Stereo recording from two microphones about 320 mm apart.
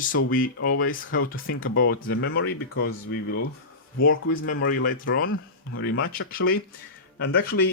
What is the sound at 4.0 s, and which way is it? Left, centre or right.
Speech, left.